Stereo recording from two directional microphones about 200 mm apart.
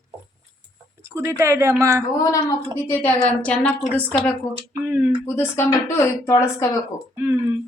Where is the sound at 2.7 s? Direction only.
10° left (ahead or behind).